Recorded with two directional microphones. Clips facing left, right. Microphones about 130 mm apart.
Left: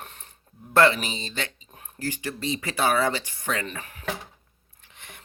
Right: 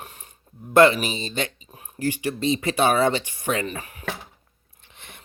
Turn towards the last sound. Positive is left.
turn(degrees=-20)  # may be behind; listen again after turning